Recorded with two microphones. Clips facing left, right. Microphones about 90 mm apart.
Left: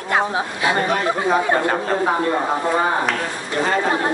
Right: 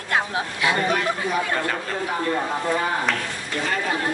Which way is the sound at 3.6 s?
35° left (ahead or behind).